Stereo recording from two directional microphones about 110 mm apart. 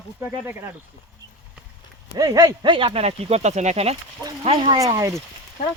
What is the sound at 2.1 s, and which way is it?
Speech, 35° right (ahead or behind).